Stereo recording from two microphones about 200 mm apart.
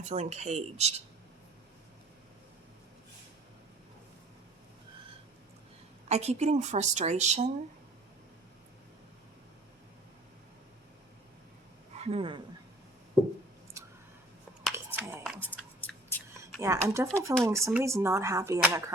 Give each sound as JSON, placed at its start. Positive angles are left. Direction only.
{"t": 0.0, "sound": "a woman's voice", "side_deg": -35}
{"t": 6.1, "sound": "a woman's voice", "side_deg": -35}
{"t": 11.9, "sound": "speech", "side_deg": -30}
{"t": 13.7, "sound": "a sound", "side_deg": -15}
{"t": 14.6, "sound": "a sound", "side_deg": -5}
{"t": 15.8, "sound": "whispering", "side_deg": 10}
{"t": 16.6, "sound": "speech", "side_deg": -15}